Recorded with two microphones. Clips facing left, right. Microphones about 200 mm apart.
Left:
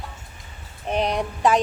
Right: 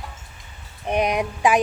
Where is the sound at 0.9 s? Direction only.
10° right (ahead or behind).